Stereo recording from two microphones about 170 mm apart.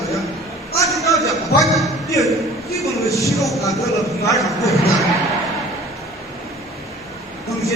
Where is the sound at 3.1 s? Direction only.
20° left (ahead or behind).